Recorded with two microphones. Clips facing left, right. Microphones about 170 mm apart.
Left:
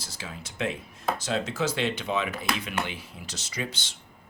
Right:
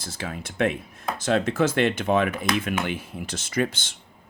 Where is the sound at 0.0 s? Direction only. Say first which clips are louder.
Right 7 dB; 55° right (ahead or behind).